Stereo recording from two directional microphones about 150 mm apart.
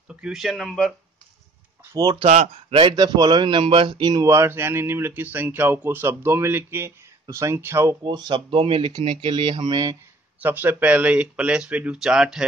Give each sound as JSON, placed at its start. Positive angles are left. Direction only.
{"t": 0.1, "sound": "speech", "side_deg": -5}
{"t": 2.0, "sound": "speech", "side_deg": -30}
{"t": 2.2, "sound": "a man's voice", "side_deg": -50}
{"t": 8.0, "sound": "speech", "side_deg": -30}
{"t": 10.4, "sound": "a man's voice", "side_deg": -10}